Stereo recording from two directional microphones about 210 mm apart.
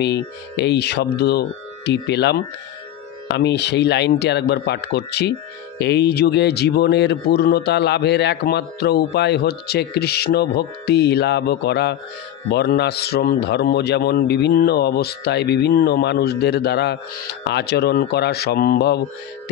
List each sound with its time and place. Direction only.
0.0 s a man's voice: 55° left (ahead or behind)